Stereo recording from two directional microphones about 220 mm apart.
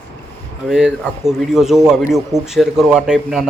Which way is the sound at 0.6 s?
Centre (ahead or behind).